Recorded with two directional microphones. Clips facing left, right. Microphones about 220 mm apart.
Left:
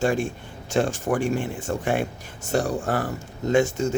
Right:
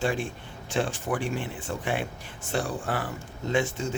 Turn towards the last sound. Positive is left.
turn(degrees=45)  # may be behind; listen again after turning